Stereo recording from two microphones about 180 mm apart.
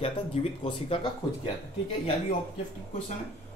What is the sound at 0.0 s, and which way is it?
Speech, 35° left (ahead or behind).